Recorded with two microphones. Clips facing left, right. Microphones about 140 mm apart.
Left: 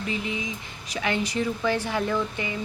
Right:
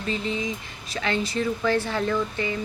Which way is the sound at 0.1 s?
15° left (ahead or behind).